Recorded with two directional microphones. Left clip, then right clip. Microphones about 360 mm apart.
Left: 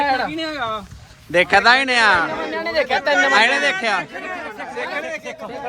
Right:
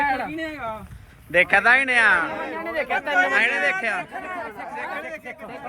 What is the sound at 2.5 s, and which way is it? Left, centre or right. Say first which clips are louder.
Speech: left 7 dB; left.